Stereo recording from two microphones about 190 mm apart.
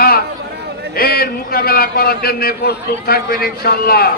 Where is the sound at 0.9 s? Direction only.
50° left (ahead or behind).